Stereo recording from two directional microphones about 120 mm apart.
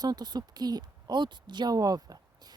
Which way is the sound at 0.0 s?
35° right (ahead or behind).